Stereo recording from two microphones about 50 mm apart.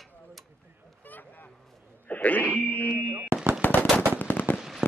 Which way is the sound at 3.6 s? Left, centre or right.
Left.